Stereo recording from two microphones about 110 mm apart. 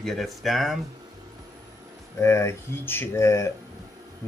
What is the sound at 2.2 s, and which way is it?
Speech, 25° left (ahead or behind).